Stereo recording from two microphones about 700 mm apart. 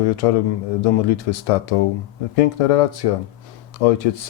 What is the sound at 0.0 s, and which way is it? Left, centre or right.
Speech, left.